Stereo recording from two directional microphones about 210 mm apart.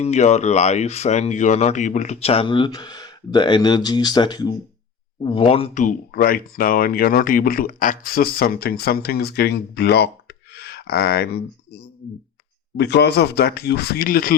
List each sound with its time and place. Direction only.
0.0 s speech: 35° left (ahead or behind)